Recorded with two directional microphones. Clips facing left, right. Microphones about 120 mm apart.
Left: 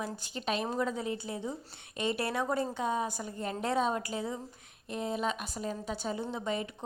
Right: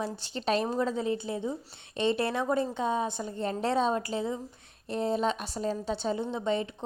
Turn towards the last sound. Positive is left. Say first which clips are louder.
# right 5 dB
turn(degrees=-25)  # may be behind; listen again after turning